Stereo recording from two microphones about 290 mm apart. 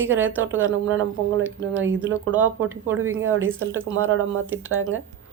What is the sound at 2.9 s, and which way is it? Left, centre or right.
Speech, right.